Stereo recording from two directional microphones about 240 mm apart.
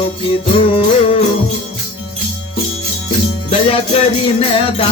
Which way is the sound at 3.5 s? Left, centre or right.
Left.